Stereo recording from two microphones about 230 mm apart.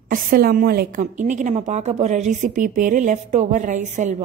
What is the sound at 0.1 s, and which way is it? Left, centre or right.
A woman's voice, right.